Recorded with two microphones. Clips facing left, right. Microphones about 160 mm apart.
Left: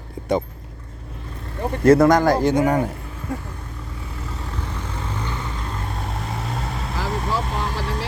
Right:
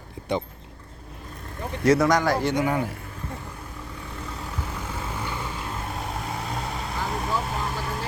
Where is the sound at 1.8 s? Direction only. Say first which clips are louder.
Left 6 dB; 55° left (ahead or behind).